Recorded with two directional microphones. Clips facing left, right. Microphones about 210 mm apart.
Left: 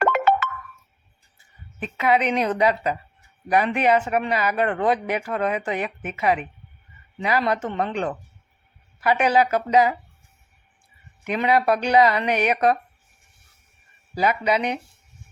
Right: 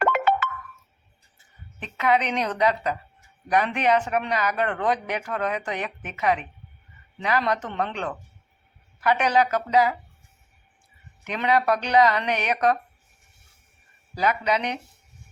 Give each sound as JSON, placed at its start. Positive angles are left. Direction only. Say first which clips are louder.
{"t": 0.0, "sound": "music", "louder": "left 2 dB", "side_deg": 45}
{"t": 1.8, "sound": "speech", "louder": "left 2 dB", "side_deg": 10}
{"t": 11.2, "sound": "speech", "louder": "left 2 dB", "side_deg": 10}
{"t": 14.2, "sound": "speech", "louder": "left 2 dB", "side_deg": 10}